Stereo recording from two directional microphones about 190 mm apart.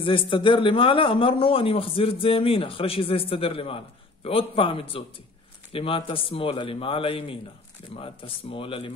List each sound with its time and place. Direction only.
0.0 s a man's voice: 25° left (ahead or behind)